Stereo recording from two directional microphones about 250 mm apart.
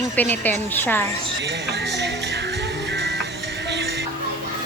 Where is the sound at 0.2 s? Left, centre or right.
Centre.